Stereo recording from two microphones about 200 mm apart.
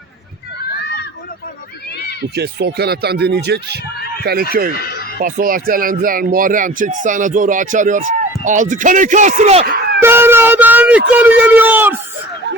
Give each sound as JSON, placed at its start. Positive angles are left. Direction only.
{"t": 0.8, "sound": "run", "side_deg": 55}
{"t": 2.3, "sound": "speech", "side_deg": -55}
{"t": 4.8, "sound": "speech", "side_deg": 50}
{"t": 5.2, "sound": "speech", "side_deg": -45}
{"t": 10.0, "sound": "speech", "side_deg": -10}